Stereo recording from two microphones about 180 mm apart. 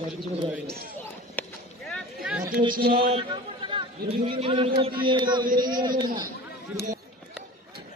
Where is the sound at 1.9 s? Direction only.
5° right (ahead or behind).